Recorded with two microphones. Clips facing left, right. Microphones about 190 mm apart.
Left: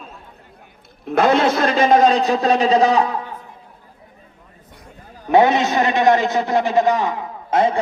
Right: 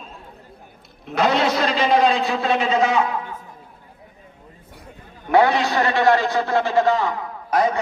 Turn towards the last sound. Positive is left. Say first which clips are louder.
# left 2 dB
turn(degrees=25)  # may be behind; listen again after turning